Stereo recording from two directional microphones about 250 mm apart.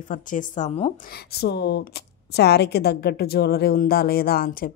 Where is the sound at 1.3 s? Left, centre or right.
Left.